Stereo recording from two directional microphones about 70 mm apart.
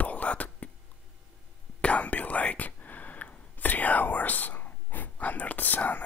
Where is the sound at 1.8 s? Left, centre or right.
Centre.